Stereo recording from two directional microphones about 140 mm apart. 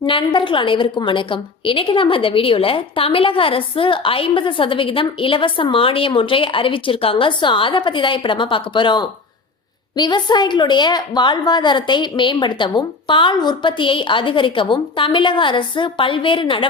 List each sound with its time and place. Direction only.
0.0 s a woman's voice: 35° left (ahead or behind)